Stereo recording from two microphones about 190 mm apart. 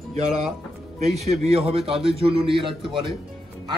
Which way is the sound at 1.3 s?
35° right (ahead or behind).